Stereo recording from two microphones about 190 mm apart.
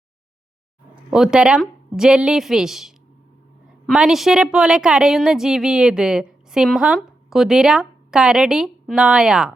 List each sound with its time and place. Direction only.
1.1 s a woman's voice: 5° right (ahead or behind)